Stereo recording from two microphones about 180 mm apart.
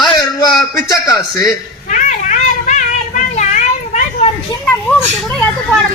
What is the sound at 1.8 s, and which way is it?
Children playing, 45° left (ahead or behind).